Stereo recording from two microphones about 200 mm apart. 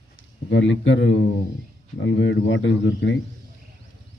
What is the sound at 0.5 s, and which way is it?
Speech, 70° left (ahead or behind).